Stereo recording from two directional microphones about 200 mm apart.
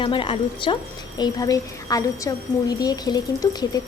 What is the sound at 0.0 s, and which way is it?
A woman's voice, 25° left (ahead or behind).